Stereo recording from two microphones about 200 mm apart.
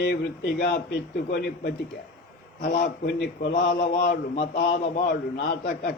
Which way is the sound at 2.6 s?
45° left (ahead or behind).